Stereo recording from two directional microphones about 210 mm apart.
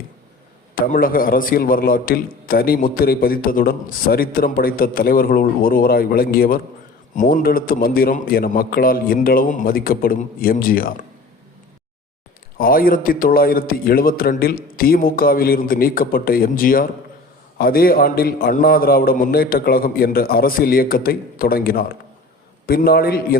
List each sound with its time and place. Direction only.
0.8 s a man's voice: 45° left (ahead or behind)
12.5 s a man's voice: 45° left (ahead or behind)